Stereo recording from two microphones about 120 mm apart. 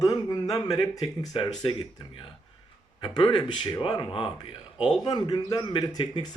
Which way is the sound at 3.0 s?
40° left (ahead or behind).